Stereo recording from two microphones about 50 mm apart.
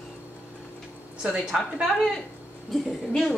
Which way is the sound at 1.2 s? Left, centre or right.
Centre.